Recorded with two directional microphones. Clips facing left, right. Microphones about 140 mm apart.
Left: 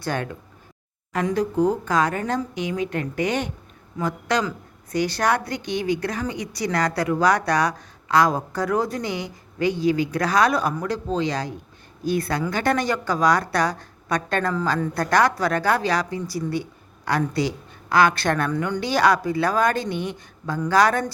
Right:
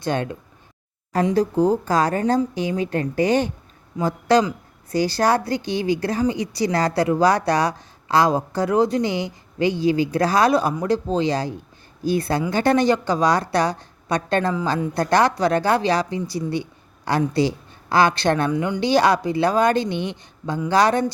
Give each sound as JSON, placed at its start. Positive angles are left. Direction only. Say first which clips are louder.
{"t": 0.0, "sound": "a woman's voice", "louder": "right 3 dB", "side_deg": -20}
{"t": 1.1, "sound": "a woman's voice", "louder": "right 3 dB", "side_deg": -35}
{"t": 18.5, "sound": "a woman's voice", "louder": "right 2 dB", "side_deg": -10}
{"t": 18.8, "sound": "a woman's voice", "louder": "right 2 dB", "side_deg": -30}